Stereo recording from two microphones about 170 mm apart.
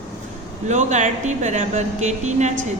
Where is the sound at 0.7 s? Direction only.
45° right (ahead or behind).